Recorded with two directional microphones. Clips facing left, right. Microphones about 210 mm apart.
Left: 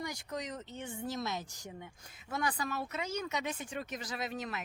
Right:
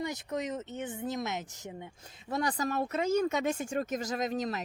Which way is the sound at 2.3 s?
40° right (ahead or behind).